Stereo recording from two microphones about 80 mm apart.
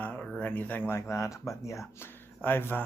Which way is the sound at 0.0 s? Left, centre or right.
Left.